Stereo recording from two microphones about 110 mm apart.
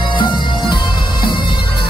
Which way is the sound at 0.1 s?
45° left (ahead or behind).